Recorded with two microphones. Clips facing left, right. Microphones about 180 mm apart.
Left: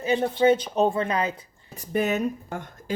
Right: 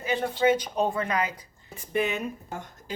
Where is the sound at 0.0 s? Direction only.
25° left (ahead or behind).